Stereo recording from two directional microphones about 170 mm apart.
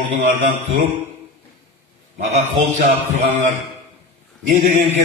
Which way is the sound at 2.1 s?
45° right (ahead or behind).